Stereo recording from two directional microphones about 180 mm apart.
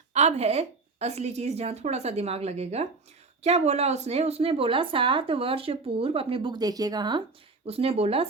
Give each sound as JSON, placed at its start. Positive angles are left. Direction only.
{"t": 0.1, "sound": "speech", "side_deg": -40}
{"t": 7.7, "sound": "speech", "side_deg": -35}